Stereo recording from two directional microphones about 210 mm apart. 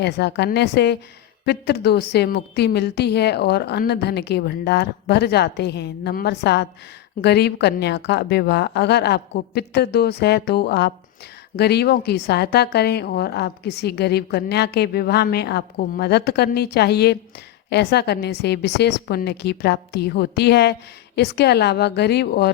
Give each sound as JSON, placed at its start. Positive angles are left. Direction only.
{"t": 0.0, "sound": "a woman's voice", "side_deg": 55}